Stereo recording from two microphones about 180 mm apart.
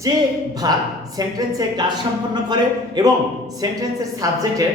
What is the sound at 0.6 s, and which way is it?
A man's voice, 20° right (ahead or behind).